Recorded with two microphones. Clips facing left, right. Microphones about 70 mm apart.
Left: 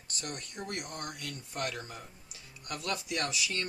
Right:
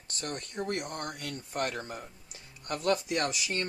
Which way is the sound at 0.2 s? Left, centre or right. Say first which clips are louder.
Right 5 dB; right.